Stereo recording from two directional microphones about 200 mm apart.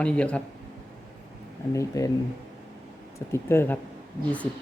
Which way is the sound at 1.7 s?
15° left (ahead or behind).